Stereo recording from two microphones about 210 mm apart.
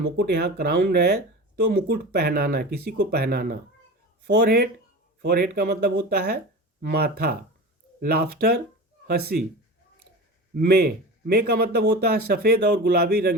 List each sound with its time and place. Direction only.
0.2 s speech: 50° right (ahead or behind)
10.5 s speech: 50° right (ahead or behind)